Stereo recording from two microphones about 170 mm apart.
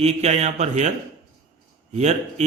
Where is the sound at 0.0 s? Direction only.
40° right (ahead or behind).